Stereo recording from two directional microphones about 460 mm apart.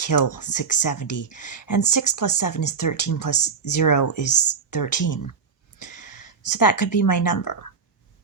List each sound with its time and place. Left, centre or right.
0.1 s speech: left